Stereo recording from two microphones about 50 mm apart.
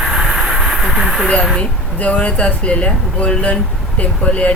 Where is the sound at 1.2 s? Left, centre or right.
Left.